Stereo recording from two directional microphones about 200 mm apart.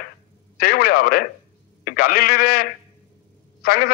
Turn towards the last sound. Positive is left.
turn(degrees=50)  # may be behind; listen again after turning